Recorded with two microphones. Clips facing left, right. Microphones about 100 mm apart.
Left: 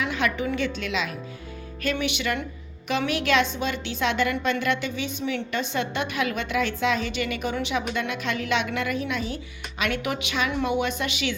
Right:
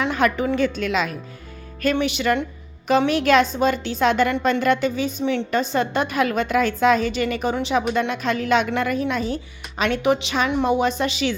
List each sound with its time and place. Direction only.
0.0 s a woman's voice: 45° right (ahead or behind)